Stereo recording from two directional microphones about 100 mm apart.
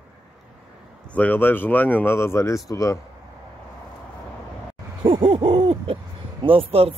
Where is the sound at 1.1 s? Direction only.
15° left (ahead or behind); by 3.0 s 30° left (ahead or behind).